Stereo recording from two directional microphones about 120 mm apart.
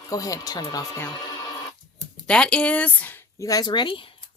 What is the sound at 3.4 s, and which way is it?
Speech, 30° left (ahead or behind).